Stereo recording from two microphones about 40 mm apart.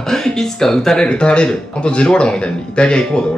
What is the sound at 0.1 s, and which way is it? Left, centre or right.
Speech, centre.